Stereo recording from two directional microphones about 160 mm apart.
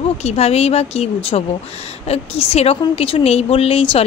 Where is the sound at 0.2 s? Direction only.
40° left (ahead or behind).